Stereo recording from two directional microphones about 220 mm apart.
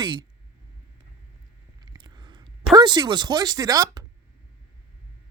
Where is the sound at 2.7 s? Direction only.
20° right (ahead or behind).